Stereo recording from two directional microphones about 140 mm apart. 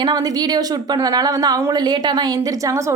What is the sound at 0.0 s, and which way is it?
Speech, 30° right (ahead or behind).